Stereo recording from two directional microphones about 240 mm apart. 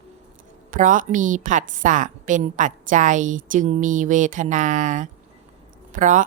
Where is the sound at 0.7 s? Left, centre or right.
Right.